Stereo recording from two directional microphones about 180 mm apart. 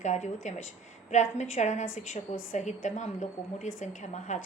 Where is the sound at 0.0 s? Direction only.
40° left (ahead or behind).